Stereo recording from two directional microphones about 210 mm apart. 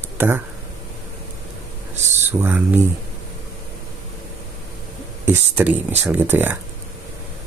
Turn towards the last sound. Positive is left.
turn(degrees=-10)  # may be behind; listen again after turning